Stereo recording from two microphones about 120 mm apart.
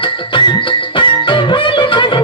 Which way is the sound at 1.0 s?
45° left (ahead or behind).